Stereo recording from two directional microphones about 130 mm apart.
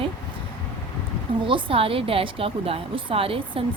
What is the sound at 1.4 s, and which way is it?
Speech, 40° right (ahead or behind).